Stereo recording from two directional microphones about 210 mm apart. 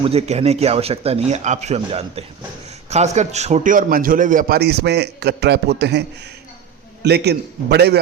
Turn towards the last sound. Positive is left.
turn(degrees=-50)  # may be behind; listen again after turning